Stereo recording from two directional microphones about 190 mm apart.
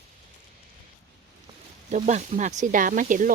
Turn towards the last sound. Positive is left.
turn(degrees=-45)  # may be behind; listen again after turning